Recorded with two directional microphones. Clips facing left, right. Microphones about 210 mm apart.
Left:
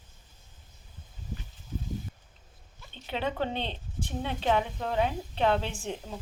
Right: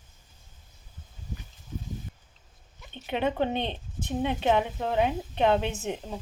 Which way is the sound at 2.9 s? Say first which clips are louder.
Right 4 dB; 15° right (ahead or behind).